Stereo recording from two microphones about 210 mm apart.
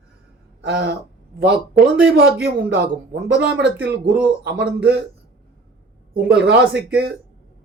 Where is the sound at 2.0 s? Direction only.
5° right (ahead or behind).